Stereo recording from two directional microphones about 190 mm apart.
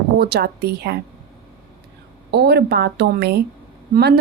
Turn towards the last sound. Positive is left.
turn(degrees=-55)  # may be behind; listen again after turning